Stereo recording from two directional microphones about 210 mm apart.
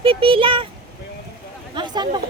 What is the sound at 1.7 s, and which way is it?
Speech, 20° right (ahead or behind).